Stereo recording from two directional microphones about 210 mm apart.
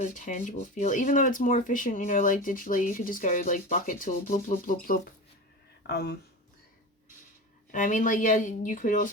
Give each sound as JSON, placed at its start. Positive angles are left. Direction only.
{"t": 0.0, "sound": "speech", "side_deg": 40}
{"t": 5.9, "sound": "speech", "side_deg": 50}
{"t": 7.7, "sound": "speech", "side_deg": 35}